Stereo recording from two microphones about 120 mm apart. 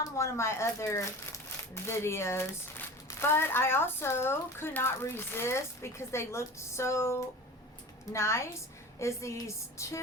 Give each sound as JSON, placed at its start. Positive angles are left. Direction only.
{"t": 0.0, "sound": "speech", "side_deg": 25}